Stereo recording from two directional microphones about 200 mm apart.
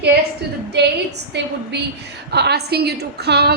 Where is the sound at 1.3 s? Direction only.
60° right (ahead or behind).